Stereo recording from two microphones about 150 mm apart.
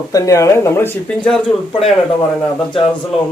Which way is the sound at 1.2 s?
Centre (ahead or behind).